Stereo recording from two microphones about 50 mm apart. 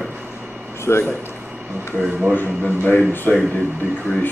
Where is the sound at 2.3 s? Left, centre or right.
Left.